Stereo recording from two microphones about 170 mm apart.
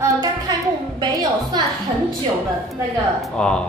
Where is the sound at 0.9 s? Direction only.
25° right (ahead or behind).